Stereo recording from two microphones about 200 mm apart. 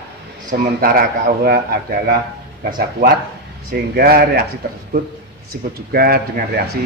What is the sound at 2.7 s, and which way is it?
A man's voice, 45° right (ahead or behind).